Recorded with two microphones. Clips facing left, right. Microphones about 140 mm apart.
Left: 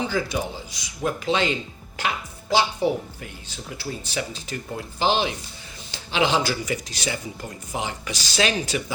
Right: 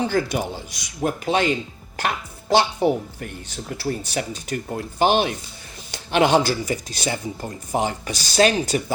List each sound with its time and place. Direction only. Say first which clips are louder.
0.0 s speech: right 3 dB; 60° right (ahead or behind)
1.0 s speech: right 2 dB; 45° right (ahead or behind)
2.0 s speech: right 2 dB; 55° right (ahead or behind)